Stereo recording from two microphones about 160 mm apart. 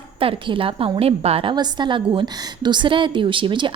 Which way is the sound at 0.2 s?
35° right (ahead or behind).